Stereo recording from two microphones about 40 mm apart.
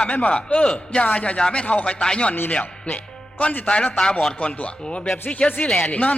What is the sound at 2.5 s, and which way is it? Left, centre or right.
A man's voice, left.